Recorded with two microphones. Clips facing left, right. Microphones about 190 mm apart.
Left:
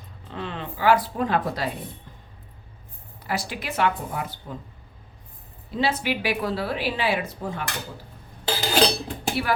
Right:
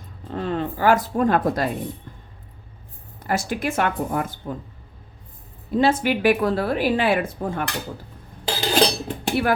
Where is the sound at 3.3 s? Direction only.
50° right (ahead or behind).